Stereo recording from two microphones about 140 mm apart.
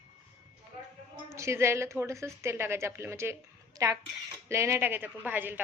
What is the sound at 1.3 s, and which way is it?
A woman's voice, 20° right (ahead or behind).